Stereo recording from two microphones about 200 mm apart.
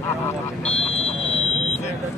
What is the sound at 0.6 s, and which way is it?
Vehicle, 30° left (ahead or behind).